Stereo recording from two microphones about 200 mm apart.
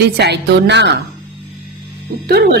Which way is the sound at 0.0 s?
55° right (ahead or behind).